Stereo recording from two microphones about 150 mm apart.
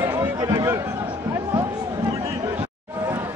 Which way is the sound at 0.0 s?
20° right (ahead or behind).